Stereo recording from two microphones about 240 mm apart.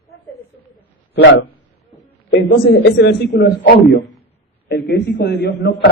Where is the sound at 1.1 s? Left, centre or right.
Left.